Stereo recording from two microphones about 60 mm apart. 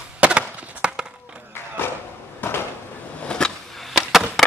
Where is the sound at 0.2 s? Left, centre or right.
Right.